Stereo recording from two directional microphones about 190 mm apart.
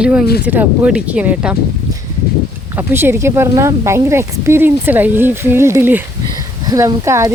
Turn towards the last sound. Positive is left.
turn(degrees=-15)  # may be behind; listen again after turning